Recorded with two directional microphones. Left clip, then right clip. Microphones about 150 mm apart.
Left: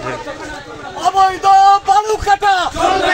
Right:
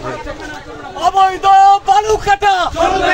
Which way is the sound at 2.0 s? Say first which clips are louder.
Right 1 dB; 45° right (ahead or behind).